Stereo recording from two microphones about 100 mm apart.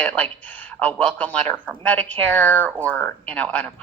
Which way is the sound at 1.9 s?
15° left (ahead or behind).